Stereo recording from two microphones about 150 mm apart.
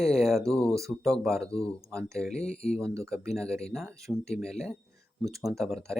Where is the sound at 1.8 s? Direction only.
20° right (ahead or behind).